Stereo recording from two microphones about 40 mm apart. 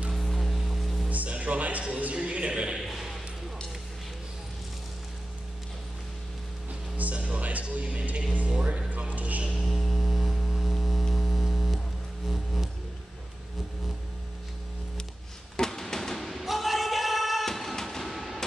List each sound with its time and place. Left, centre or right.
0.1 s a sound: centre
1.0 s music: right
2.1 s a man's voice: right
2.9 s ping: centre
7.0 s music: right
7.7 s speech: right
8.6 s a sound: right
9.1 s music: right
9.6 s mains hum: centre
15.5 s music: centre
16.2 s music: centre
17.5 s a sound: centre